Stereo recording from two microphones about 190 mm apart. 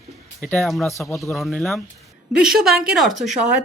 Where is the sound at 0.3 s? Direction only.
5° left (ahead or behind).